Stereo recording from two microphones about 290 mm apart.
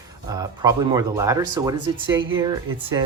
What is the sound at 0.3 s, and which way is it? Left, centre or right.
Speech, centre.